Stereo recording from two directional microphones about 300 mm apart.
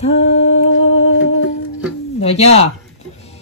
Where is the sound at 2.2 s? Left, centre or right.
Left.